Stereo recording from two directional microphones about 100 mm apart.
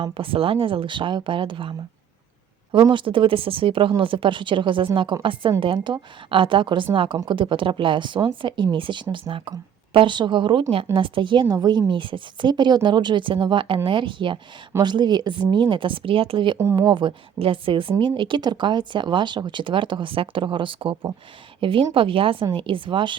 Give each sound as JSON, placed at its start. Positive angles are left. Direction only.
{"t": 0.0, "sound": "speech", "side_deg": -65}
{"t": 2.9, "sound": "a woman's voice", "side_deg": -55}
{"t": 16.6, "sound": "speech", "side_deg": -25}
{"t": 16.8, "sound": "speech", "side_deg": -50}